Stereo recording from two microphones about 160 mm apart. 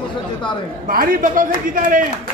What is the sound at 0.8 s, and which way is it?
A man's voice, 65° right (ahead or behind).